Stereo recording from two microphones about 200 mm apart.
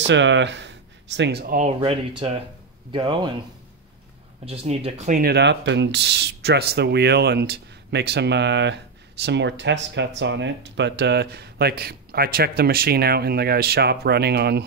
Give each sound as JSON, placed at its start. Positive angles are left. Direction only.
{"t": 0.0, "sound": "speech", "side_deg": -65}
{"t": 1.8, "sound": "speech", "side_deg": -30}
{"t": 4.5, "sound": "speech", "side_deg": -30}